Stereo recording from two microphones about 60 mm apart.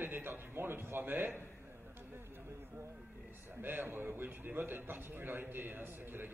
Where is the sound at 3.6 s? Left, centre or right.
Right.